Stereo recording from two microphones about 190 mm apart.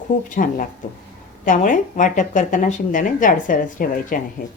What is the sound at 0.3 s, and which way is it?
Speech, 45° left (ahead or behind).